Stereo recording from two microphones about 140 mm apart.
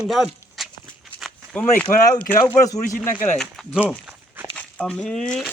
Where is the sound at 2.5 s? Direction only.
25° left (ahead or behind).